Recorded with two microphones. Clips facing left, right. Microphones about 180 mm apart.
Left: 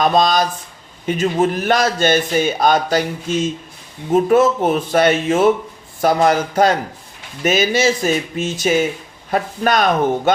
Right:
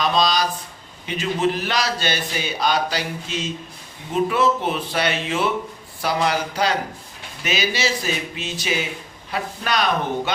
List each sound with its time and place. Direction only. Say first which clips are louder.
0.0 s a man's voice: left 5 dB; 50° left (ahead or behind)